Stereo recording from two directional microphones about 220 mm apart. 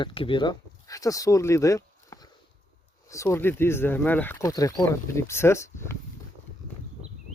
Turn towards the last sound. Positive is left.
turn(degrees=10)  # may be behind; listen again after turning